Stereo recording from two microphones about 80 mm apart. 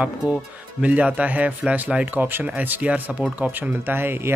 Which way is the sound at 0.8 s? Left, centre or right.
Centre.